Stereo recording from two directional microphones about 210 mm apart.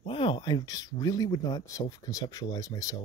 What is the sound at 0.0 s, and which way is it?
Speech, 25° left (ahead or behind).